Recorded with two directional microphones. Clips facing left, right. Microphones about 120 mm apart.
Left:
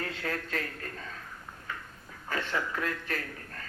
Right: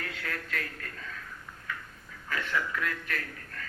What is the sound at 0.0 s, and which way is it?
A man's voice, 30° left (ahead or behind).